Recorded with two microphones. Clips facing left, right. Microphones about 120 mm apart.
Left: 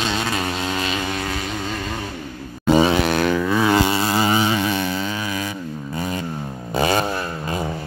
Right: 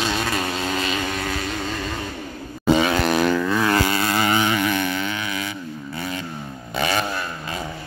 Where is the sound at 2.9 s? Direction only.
Centre (ahead or behind); by 5.2 s 30° left (ahead or behind).